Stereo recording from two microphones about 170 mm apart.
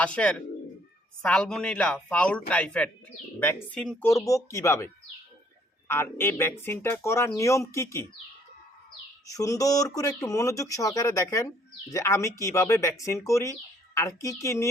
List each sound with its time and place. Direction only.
0.0 s speech: 5° left (ahead or behind)
5.9 s speech: 15° left (ahead or behind)
9.3 s speech: 20° left (ahead or behind)